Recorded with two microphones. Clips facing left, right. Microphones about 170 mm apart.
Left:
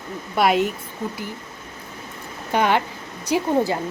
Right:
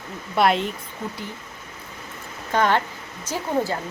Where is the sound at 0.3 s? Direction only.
5° left (ahead or behind).